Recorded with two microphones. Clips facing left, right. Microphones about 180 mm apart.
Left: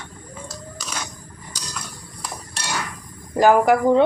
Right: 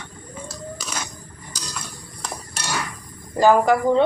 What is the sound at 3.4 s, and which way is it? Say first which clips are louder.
Speech: left 1 dB; 15° left (ahead or behind).